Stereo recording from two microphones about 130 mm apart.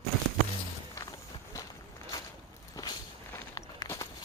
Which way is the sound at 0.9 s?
25° left (ahead or behind).